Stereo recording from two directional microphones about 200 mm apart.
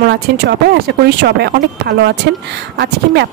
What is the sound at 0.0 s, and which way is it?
Speech, 55° right (ahead or behind).